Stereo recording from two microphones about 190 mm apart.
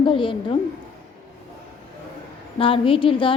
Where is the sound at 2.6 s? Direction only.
30° left (ahead or behind).